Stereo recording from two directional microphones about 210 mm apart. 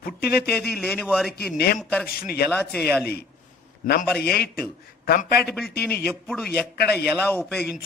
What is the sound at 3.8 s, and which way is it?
A man's voice, 45° left (ahead or behind).